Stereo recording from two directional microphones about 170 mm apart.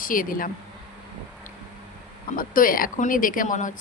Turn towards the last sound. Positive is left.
turn(degrees=50)  # may be behind; listen again after turning